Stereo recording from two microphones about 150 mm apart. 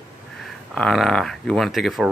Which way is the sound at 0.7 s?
Centre (ahead or behind).